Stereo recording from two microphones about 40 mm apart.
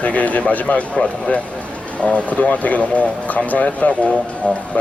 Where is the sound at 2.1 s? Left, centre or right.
Left.